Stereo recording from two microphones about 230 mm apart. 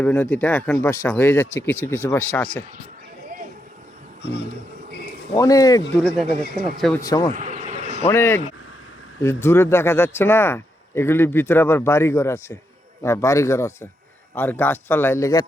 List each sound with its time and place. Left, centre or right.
0.0 s speech: centre
4.2 s speech: left
5.3 s speech: centre
6.8 s speech: centre
7.3 s a sound: right
8.0 s speech: centre